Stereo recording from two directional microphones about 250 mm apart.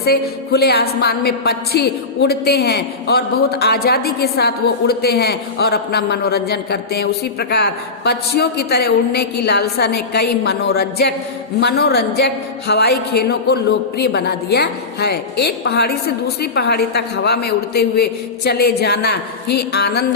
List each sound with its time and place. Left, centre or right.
0.0 s a woman's voice: left